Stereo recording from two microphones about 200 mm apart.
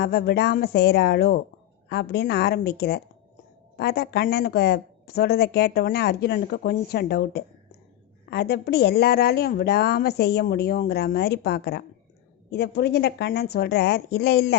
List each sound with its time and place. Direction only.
0.0 s a woman's voice: 50° left (ahead or behind)